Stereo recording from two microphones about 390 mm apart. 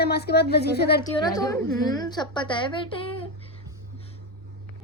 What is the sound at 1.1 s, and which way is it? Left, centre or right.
Speech, centre.